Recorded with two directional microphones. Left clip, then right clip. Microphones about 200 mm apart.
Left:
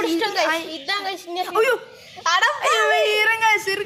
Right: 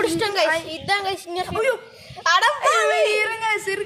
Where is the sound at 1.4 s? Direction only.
15° left (ahead or behind).